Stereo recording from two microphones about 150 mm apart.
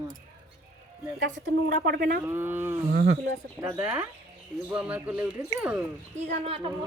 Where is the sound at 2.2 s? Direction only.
15° right (ahead or behind).